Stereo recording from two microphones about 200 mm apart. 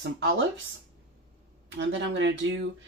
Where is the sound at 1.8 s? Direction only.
65° right (ahead or behind).